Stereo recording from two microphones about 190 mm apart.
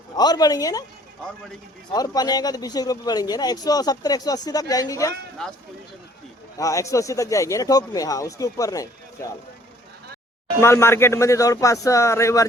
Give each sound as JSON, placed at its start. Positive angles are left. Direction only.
{"t": 0.2, "sound": "speech", "side_deg": 20}
{"t": 1.9, "sound": "speech", "side_deg": 20}
{"t": 5.4, "sound": "speech", "side_deg": 0}
{"t": 6.6, "sound": "speech", "side_deg": 15}
{"t": 10.6, "sound": "speech", "side_deg": 15}